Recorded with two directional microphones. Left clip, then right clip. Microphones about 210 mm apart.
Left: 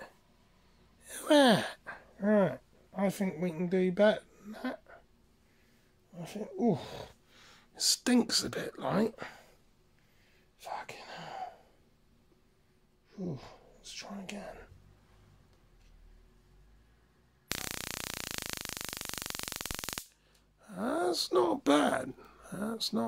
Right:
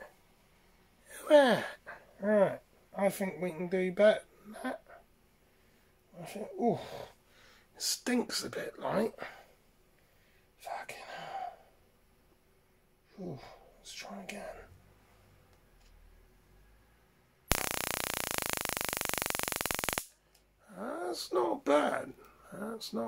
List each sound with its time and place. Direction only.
1.0 s gasp: 50° left (ahead or behind)
6.1 s speech: 45° left (ahead or behind)
10.6 s whispering: 45° left (ahead or behind)
13.1 s speech: 45° left (ahead or behind)
17.5 s a sound: centre (ahead or behind)
20.6 s speech: 55° left (ahead or behind)